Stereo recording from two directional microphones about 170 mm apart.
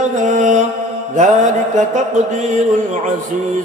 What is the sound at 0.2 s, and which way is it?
Mantra, 45° right (ahead or behind).